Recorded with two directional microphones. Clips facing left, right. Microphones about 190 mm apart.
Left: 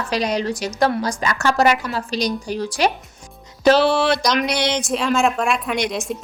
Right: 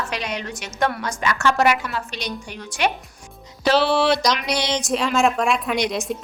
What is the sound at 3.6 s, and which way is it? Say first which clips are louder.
Speech: left 3 dB; 45° left (ahead or behind).